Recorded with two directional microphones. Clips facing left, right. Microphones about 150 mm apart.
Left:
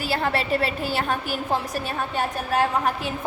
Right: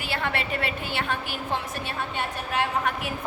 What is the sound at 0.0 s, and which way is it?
A woman's voice, 35° left (ahead or behind).